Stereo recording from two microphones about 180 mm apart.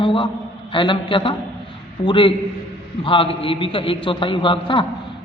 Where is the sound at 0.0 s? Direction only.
30° left (ahead or behind).